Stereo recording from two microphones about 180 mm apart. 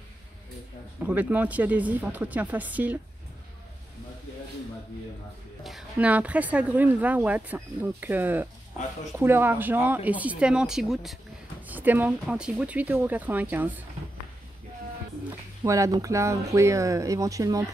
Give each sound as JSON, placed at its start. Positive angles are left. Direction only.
{"t": 1.0, "sound": "speech", "side_deg": -10}
{"t": 5.6, "sound": "speech", "side_deg": 0}
{"t": 15.6, "sound": "speech", "side_deg": -15}